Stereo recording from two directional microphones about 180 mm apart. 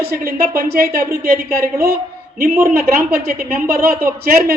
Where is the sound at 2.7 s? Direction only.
55° right (ahead or behind).